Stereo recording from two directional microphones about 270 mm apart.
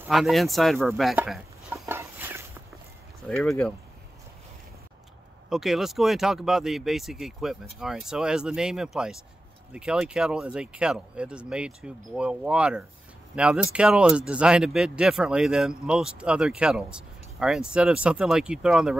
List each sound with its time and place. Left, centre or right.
0.0 s chop: centre
3.3 s speech: centre
5.5 s speech: centre